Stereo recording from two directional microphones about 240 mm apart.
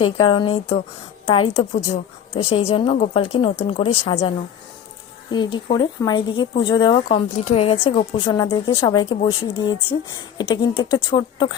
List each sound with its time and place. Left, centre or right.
0.0 s speech: centre